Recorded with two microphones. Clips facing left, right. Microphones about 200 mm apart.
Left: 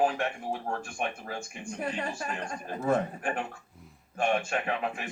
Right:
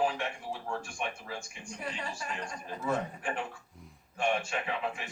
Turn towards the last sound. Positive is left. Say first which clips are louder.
# left 3 dB
turn(degrees=50)  # may be behind; listen again after turning